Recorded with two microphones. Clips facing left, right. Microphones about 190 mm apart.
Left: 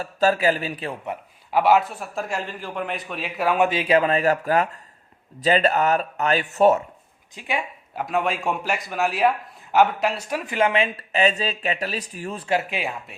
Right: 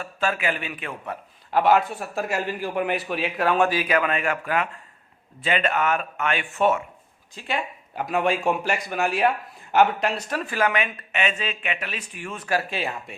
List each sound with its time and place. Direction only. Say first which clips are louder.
0.0 s speech: left 6 dB; 40° left (ahead or behind)
1.0 s a man's voice: left 2 dB; 15° left (ahead or behind)
3.7 s speech: left 3 dB; 25° left (ahead or behind)
7.3 s speech: left 1 dB; 15° left (ahead or behind)
7.9 s a man's voice: right 1 dB; centre (ahead or behind); by 12.5 s 35° left (ahead or behind)
12.5 s speech: left 1 dB; 20° left (ahead or behind)